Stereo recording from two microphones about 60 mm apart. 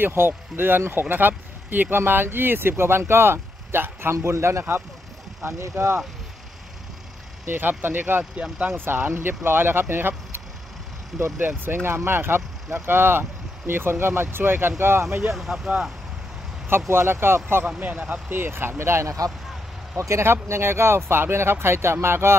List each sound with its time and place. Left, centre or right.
0.0 s speech: right
7.4 s speech: right
8.4 s speech: centre
8.7 s speech: right
15.3 s speech: centre
16.8 s speech: right
17.6 s speech: right